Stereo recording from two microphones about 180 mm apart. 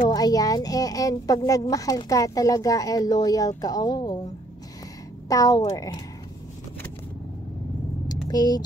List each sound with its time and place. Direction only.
0.1 s speech: 20° left (ahead or behind)
5.3 s speech: 20° left (ahead or behind)
8.3 s speech: 20° left (ahead or behind)